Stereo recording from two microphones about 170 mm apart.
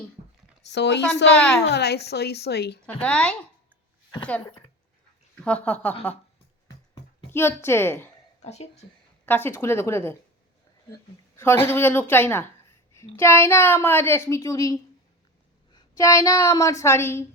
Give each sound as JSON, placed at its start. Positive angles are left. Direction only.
{"t": 0.6, "sound": "speech", "side_deg": 90}
{"t": 1.6, "sound": "a woman's voice", "side_deg": 75}
{"t": 2.8, "sound": "speech", "side_deg": 5}
{"t": 5.3, "sound": "speech", "side_deg": 5}
{"t": 7.3, "sound": "a child's voice", "side_deg": 15}
{"t": 8.4, "sound": "speech", "side_deg": 40}
{"t": 9.2, "sound": "a child's voice", "side_deg": 10}
{"t": 11.3, "sound": "a child's voice", "side_deg": 15}